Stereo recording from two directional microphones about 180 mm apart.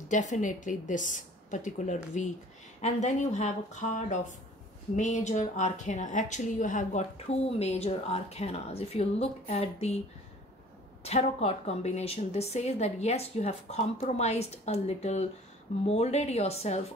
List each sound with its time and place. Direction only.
0.1 s a woman's voice: 45° left (ahead or behind)
11.1 s a woman's voice: 35° left (ahead or behind)